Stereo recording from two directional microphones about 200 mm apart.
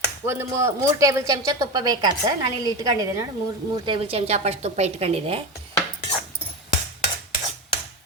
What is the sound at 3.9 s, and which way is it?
A woman's voice, 30° right (ahead or behind).